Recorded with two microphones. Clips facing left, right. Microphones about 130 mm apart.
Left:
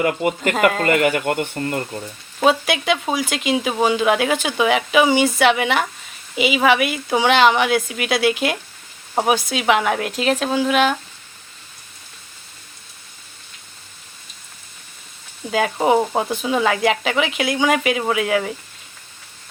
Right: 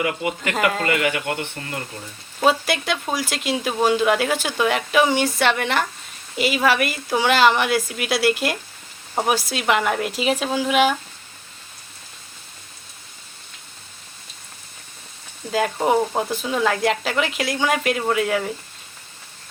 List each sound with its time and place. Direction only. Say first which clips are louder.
0.0 s speech: left 5 dB; 45° left (ahead or behind)
2.4 s speech: left 2 dB; centre (ahead or behind)
15.5 s speech: left 2 dB; 5° left (ahead or behind)